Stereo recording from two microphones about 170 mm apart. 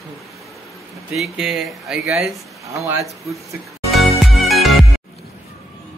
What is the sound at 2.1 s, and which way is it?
Speech, 15° right (ahead or behind).